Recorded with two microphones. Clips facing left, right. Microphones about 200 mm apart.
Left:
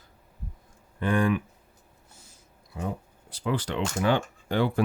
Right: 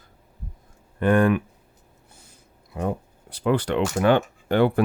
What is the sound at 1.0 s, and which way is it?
Speech, 55° right (ahead or behind).